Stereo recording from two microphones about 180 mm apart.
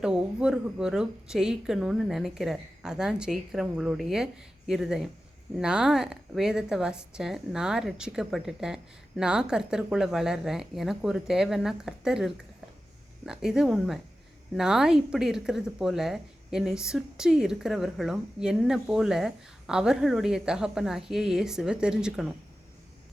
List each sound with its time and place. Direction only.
0.0 s speech: 5° right (ahead or behind)